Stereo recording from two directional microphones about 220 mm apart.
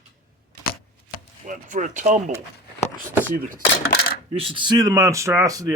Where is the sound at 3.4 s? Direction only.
40° right (ahead or behind).